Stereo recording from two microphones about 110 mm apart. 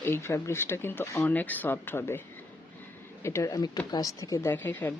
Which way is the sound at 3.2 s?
25° left (ahead or behind).